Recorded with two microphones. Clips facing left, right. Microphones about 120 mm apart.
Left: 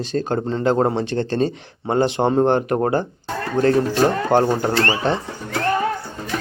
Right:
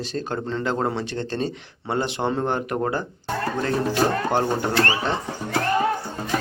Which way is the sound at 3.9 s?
40° left (ahead or behind).